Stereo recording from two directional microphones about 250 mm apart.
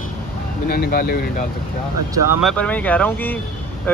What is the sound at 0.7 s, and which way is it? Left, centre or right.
Speech, left.